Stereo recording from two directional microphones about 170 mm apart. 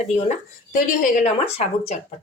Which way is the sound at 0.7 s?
55° left (ahead or behind).